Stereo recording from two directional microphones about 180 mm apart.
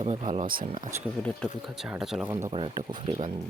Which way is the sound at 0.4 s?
50° right (ahead or behind).